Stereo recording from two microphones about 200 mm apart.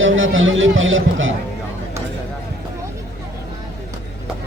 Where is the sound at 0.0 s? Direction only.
75° right (ahead or behind).